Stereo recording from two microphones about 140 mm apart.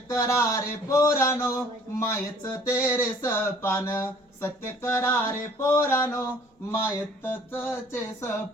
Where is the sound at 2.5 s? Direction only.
15° left (ahead or behind).